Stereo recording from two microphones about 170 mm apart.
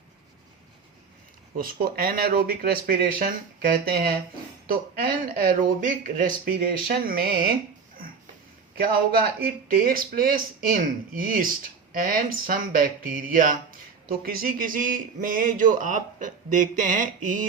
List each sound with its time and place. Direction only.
1.5 s speech: 60° right (ahead or behind)
8.8 s speech: 65° right (ahead or behind)